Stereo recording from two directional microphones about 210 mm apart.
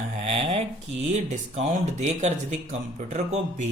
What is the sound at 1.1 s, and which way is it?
Speech, 30° right (ahead or behind).